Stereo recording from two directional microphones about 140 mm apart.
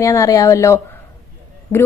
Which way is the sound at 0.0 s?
25° left (ahead or behind).